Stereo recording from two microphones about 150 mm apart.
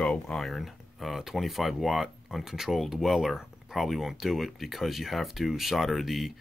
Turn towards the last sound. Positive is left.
turn(degrees=0)  # may be behind; listen again after turning